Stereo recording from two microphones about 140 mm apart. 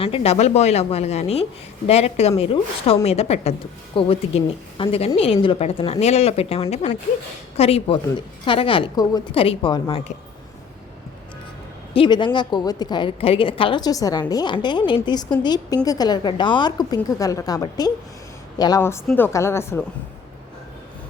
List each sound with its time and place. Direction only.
0.0 s a woman's voice: 45° left (ahead or behind)
6.8 s speech: 55° left (ahead or behind)
7.5 s a woman's voice: 45° left (ahead or behind)
9.7 s a woman's voice: 30° left (ahead or behind)
11.9 s a woman's voice: 35° left (ahead or behind)
18.8 s a woman's voice: 20° left (ahead or behind)